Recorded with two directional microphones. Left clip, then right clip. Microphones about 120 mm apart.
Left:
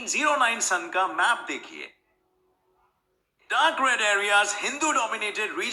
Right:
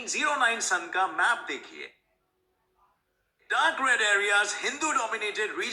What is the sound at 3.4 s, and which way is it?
A man's voice, 35° left (ahead or behind).